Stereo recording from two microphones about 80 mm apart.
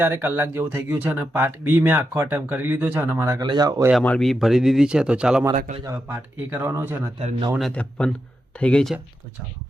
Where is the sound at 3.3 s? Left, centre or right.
Right.